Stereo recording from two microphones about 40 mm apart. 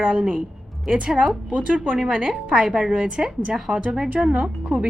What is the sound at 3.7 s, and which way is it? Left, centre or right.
Speech, right.